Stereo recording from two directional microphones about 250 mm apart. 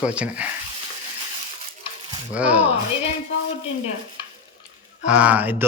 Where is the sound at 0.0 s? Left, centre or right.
Centre.